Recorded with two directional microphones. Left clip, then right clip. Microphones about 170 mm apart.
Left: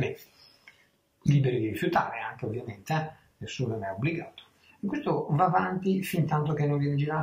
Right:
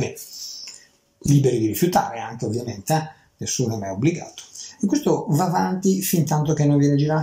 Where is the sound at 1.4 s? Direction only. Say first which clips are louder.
Right 8 dB; 30° right (ahead or behind).